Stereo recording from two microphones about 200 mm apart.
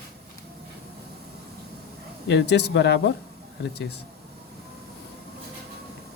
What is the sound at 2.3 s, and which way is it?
Speech, 60° left (ahead or behind).